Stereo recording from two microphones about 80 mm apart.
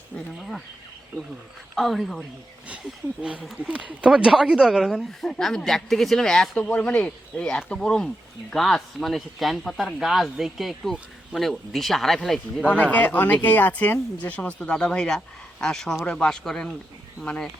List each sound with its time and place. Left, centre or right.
0.3 s speech: centre
1.7 s speech: centre
3.6 s speech: centre
6.6 s speech: centre
12.7 s speech: centre